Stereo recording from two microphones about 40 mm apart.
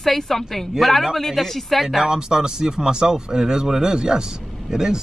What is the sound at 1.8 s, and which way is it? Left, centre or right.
Speech, centre.